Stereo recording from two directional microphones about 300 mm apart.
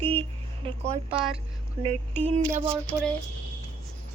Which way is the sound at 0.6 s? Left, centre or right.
Centre.